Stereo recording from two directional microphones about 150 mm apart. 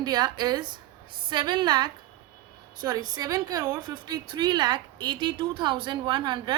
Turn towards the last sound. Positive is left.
turn(degrees=-30)  # may be behind; listen again after turning